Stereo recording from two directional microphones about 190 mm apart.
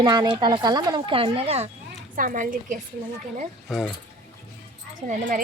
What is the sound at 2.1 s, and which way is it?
Speech, 45° right (ahead or behind).